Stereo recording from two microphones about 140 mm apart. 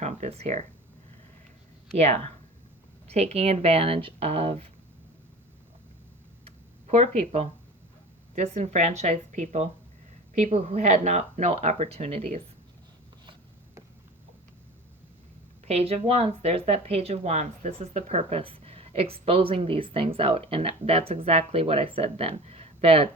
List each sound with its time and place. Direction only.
0.0 s speech: 50° right (ahead or behind)
2.0 s speech: 50° right (ahead or behind)
6.8 s speech: 50° right (ahead or behind)
8.4 s a woman's voice: 55° right (ahead or behind)
15.6 s speech: 45° right (ahead or behind)